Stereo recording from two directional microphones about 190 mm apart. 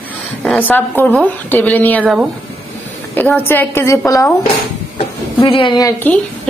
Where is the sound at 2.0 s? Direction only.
5° right (ahead or behind).